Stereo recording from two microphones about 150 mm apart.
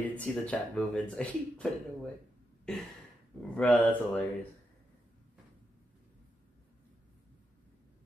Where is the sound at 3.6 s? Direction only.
10° left (ahead or behind).